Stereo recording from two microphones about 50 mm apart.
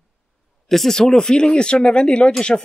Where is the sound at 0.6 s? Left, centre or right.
Centre.